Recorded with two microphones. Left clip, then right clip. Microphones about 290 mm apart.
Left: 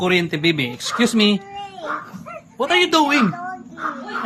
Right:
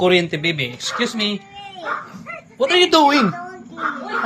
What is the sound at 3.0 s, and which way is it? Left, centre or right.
Speech, left.